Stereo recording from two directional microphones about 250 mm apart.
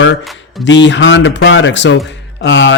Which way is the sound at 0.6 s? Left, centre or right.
Left.